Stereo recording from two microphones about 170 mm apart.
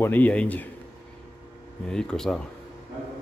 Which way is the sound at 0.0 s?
10° left (ahead or behind).